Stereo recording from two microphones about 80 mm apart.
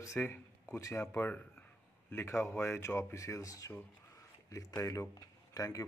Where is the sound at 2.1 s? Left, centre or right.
Left.